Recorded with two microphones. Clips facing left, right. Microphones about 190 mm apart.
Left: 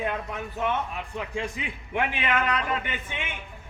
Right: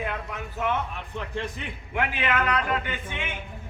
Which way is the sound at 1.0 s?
5° left (ahead or behind).